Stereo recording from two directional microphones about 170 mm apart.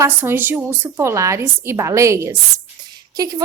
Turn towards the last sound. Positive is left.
turn(degrees=-20)  # may be behind; listen again after turning